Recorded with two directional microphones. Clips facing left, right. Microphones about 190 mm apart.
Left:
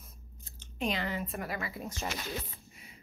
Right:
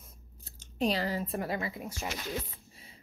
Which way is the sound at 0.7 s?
35° right (ahead or behind).